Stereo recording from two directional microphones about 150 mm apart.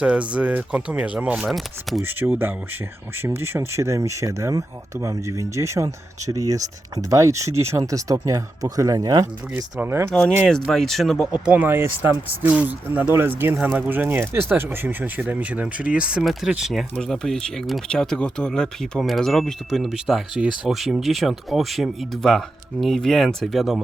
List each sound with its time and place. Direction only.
0.0 s speech: 10° right (ahead or behind)
2.0 s speech: 15° right (ahead or behind)
10.1 s speech: 5° left (ahead or behind)
11.4 s speech: 10° right (ahead or behind)